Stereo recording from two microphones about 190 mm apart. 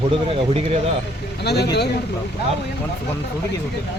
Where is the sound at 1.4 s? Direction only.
60° left (ahead or behind).